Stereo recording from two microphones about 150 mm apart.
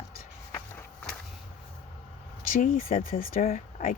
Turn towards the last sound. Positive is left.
turn(degrees=55)  # may be behind; listen again after turning